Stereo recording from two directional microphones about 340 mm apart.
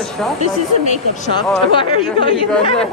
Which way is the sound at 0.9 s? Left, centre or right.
Centre.